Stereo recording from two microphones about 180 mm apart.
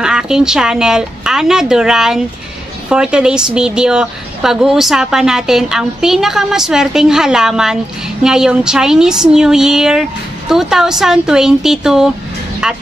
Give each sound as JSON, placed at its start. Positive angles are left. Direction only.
{"t": 0.0, "sound": "a woman's voice", "side_deg": -5}